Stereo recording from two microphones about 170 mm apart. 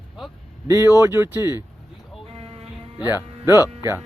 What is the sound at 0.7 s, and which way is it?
Speech, 15° right (ahead or behind).